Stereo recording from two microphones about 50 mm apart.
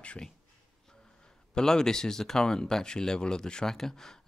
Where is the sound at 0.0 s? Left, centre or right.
Left.